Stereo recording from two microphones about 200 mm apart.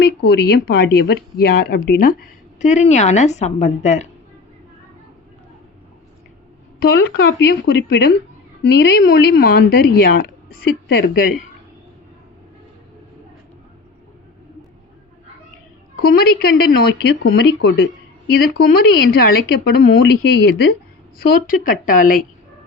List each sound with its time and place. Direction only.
0.0 s speech: 55° left (ahead or behind)
2.6 s a woman's voice: 35° left (ahead or behind)
6.8 s speech: 55° left (ahead or behind)
16.0 s speech: 50° left (ahead or behind)
21.2 s speech: 45° left (ahead or behind)